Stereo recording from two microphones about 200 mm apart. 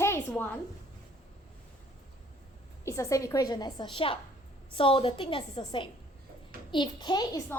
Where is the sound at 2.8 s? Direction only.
15° left (ahead or behind).